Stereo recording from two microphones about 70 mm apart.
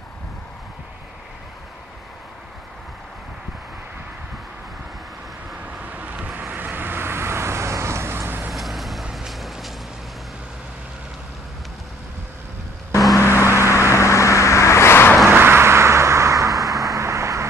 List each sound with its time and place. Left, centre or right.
5.7 s vehicle: right
8.5 s vehicle: centre
13.1 s vehicle: left
13.5 s vehicle: right
13.9 s vehicle: left
15.2 s vehicle: right